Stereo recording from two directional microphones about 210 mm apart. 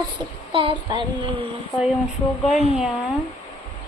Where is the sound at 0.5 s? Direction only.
25° right (ahead or behind).